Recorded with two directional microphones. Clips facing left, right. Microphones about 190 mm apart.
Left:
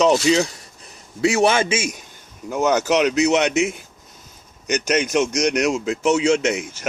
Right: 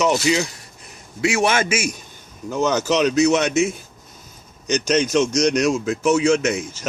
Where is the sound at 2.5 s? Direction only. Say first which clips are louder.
Left 1 dB; 15° left (ahead or behind).